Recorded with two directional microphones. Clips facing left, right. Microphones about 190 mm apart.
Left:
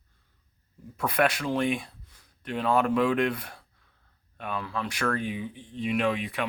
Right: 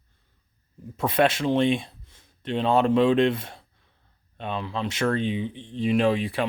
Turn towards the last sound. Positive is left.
turn(degrees=-30)  # may be behind; listen again after turning